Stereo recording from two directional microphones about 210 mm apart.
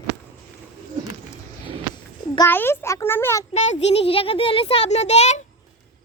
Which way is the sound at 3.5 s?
30° left (ahead or behind).